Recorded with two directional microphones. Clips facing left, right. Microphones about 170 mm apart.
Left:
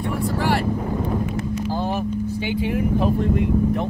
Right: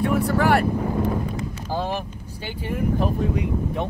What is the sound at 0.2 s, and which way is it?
Vehicle, 65° right (ahead or behind).